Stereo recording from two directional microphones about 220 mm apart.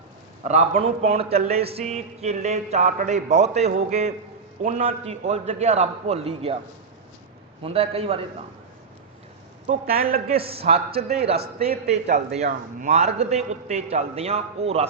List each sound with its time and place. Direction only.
0.4 s a man's voice: 30° right (ahead or behind)
7.6 s a man's voice: 25° right (ahead or behind)
9.6 s a man's voice: 25° right (ahead or behind)
12.4 s a man's voice: 35° right (ahead or behind)